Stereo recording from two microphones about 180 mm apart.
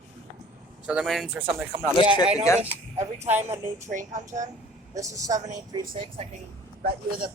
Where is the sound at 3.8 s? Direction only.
45° right (ahead or behind).